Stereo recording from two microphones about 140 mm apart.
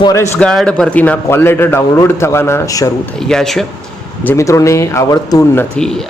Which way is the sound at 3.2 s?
5° left (ahead or behind).